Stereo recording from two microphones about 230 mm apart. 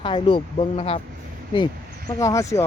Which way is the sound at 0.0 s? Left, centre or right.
Left.